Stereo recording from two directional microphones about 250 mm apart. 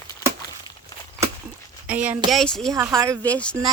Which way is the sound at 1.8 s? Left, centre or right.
Centre.